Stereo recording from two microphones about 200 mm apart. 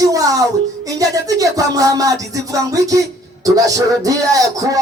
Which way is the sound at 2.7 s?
15° right (ahead or behind).